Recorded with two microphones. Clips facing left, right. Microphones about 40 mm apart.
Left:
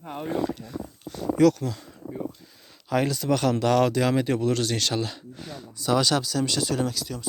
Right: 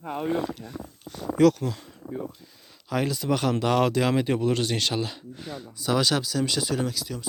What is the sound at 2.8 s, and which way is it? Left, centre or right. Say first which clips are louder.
Speech: left 2 dB; centre.